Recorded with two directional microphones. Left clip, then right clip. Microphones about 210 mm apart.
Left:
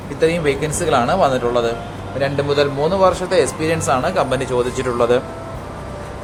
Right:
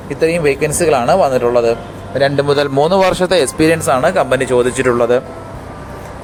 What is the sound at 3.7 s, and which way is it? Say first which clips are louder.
Speech: right 5 dB; 25° right (ahead or behind).